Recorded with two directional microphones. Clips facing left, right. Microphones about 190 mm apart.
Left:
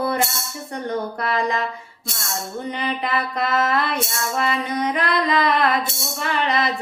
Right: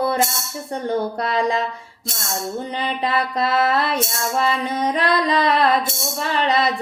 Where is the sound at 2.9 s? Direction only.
30° right (ahead or behind).